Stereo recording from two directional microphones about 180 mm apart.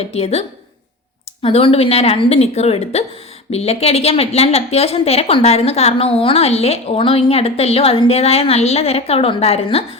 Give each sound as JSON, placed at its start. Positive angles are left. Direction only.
{"t": 0.0, "sound": "a woman's voice", "side_deg": 35}